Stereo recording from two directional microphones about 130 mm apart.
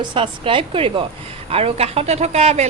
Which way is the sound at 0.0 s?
40° right (ahead or behind).